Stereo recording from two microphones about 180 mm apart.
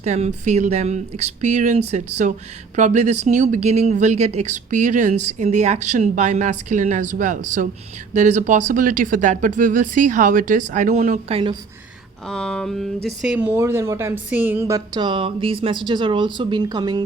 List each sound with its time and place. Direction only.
0.0 s speech: 40° right (ahead or behind)
12.3 s speech: 5° left (ahead or behind); by 14.8 s 10° right (ahead or behind)
14.9 s speech: 25° right (ahead or behind)